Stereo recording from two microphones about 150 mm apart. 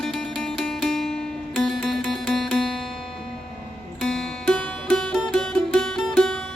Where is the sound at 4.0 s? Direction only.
5° left (ahead or behind).